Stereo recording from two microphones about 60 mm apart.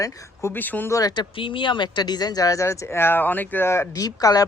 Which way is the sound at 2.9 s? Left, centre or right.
Left.